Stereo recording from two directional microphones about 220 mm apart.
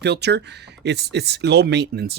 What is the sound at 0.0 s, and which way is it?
Speech, 50° right (ahead or behind).